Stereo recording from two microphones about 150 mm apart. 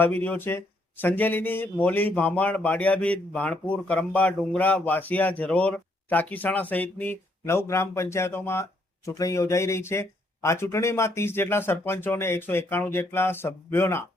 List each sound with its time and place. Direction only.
0.0 s speech: 10° left (ahead or behind)